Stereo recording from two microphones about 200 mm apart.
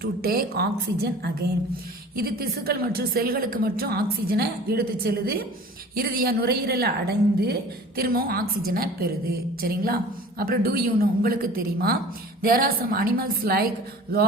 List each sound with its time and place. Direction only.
0.0 s a woman's voice: 50° right (ahead or behind)